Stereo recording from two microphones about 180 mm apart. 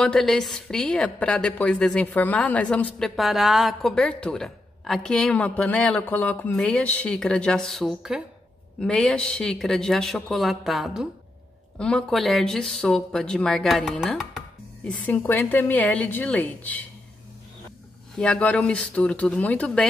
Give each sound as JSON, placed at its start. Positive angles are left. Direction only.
{"t": 0.0, "sound": "a woman's voice", "side_deg": 5}
{"t": 18.1, "sound": "a woman's voice", "side_deg": 5}